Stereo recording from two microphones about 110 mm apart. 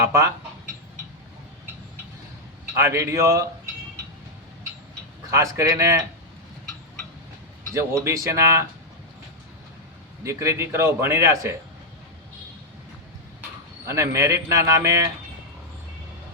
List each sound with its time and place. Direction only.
0.1 s a man's voice: 25° right (ahead or behind)
2.7 s a man's voice: 25° right (ahead or behind)
5.3 s a man's voice: 25° right (ahead or behind)
8.0 s a man's voice: 25° right (ahead or behind)
10.2 s a man's voice: 25° right (ahead or behind)
13.8 s a man's voice: 25° right (ahead or behind)